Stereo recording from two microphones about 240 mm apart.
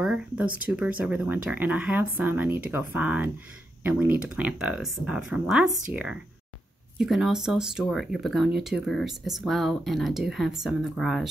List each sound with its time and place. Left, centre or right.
0.0 s speech: centre
7.0 s speech: centre